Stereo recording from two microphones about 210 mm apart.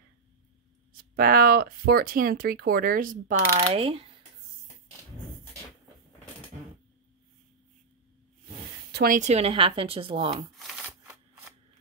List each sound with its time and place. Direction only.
0.9 s speech: 45° right (ahead or behind)
3.6 s speech: 25° right (ahead or behind)
8.9 s speech: 40° right (ahead or behind); by 10.5 s 25° right (ahead or behind)